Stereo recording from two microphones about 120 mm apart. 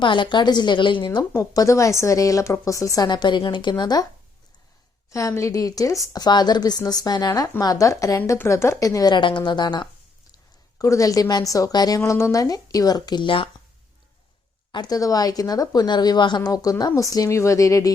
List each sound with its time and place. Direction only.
0.0 s speech: 40° left (ahead or behind)
1.3 s a woman's voice: 25° left (ahead or behind)
5.1 s a woman's voice: 25° left (ahead or behind)
10.8 s a woman's voice: 25° left (ahead or behind); by 13.5 s 45° left (ahead or behind)
14.7 s speech: 35° left (ahead or behind)